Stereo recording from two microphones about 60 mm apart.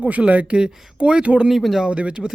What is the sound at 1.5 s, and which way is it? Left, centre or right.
Speech, centre.